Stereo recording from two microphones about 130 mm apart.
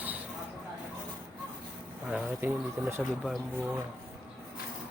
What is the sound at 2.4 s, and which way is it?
Speech, 15° right (ahead or behind).